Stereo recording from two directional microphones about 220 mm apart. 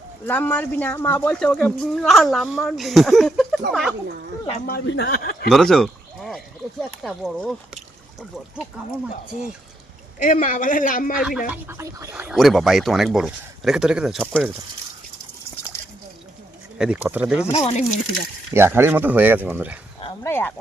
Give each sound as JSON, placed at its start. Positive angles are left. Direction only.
{"t": 0.3, "sound": "speech", "side_deg": 10}
{"t": 4.6, "sound": "a man's voice", "side_deg": 45}
{"t": 5.5, "sound": "bird", "side_deg": 0}
{"t": 7.0, "sound": "speech", "side_deg": 0}
{"t": 10.2, "sound": "speech", "side_deg": 35}
{"t": 11.2, "sound": "speech", "side_deg": 0}
{"t": 16.7, "sound": "speech", "side_deg": -5}
{"t": 17.5, "sound": "speech", "side_deg": 30}
{"t": 18.5, "sound": "speech", "side_deg": -10}
{"t": 20.0, "sound": "dog", "side_deg": 20}